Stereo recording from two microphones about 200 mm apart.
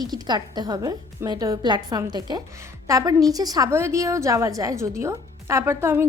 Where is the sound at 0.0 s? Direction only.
20° right (ahead or behind).